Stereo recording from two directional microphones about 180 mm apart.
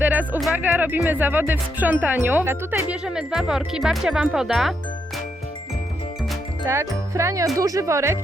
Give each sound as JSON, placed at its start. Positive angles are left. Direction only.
{"t": 0.0, "sound": "speech", "side_deg": -10}
{"t": 6.7, "sound": "speech", "side_deg": -15}